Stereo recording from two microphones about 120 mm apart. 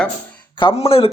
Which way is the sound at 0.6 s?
50° left (ahead or behind).